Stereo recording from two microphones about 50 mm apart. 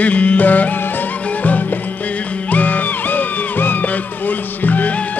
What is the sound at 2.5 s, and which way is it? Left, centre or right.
Music, left.